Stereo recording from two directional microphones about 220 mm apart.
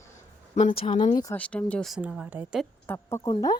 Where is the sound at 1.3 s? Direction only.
5° left (ahead or behind).